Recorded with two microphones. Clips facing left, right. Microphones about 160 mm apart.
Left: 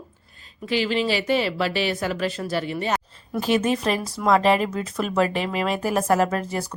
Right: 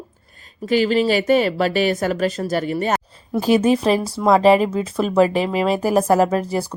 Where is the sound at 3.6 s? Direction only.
35° right (ahead or behind).